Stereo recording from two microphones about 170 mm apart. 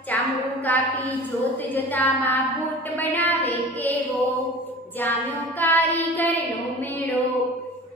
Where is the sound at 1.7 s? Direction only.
10° left (ahead or behind).